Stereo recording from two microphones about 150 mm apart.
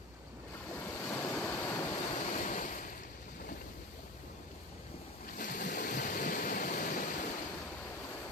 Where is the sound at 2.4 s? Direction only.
60° left (ahead or behind).